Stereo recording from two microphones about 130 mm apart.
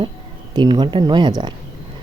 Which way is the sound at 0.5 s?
35° right (ahead or behind).